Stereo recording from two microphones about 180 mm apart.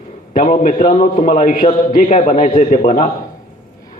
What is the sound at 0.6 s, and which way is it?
A man's voice, 40° left (ahead or behind).